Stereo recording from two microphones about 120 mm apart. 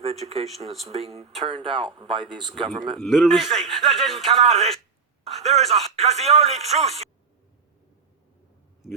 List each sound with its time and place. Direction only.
0.0 s speech: 60° right (ahead or behind); by 2.4 s 45° right (ahead or behind)
2.6 s a man's voice: centre (ahead or behind)
4.4 s speech: 60° right (ahead or behind)